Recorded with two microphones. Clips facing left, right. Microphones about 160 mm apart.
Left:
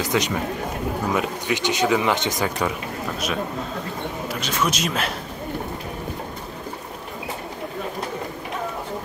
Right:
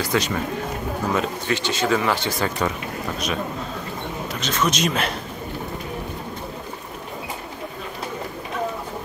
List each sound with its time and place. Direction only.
0.0 s speech: 15° left (ahead or behind)
4.3 s speech: 10° left (ahead or behind)